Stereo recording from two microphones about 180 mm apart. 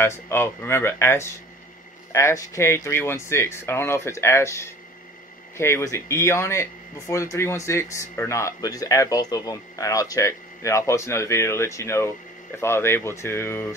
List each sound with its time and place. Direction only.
0.0 s speech: 15° left (ahead or behind)